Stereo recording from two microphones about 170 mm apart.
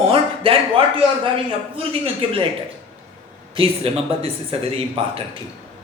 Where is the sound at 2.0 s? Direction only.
35° right (ahead or behind).